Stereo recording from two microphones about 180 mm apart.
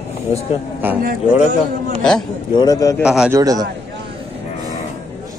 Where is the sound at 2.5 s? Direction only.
20° left (ahead or behind).